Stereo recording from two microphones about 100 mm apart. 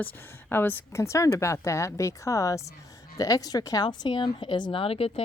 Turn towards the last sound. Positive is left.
turn(degrees=70)  # may be behind; listen again after turning